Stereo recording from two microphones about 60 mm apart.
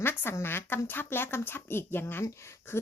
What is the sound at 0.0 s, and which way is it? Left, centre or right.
Speech, left.